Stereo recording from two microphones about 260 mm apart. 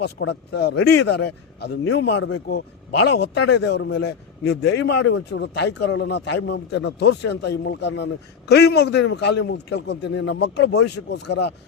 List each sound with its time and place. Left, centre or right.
0.0 s a man's voice: left
11.3 s speech: left